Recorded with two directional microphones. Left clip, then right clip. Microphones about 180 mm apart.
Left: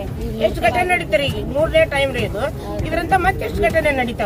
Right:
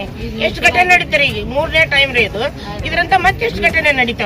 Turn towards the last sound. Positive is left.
turn(degrees=5)  # may be behind; listen again after turning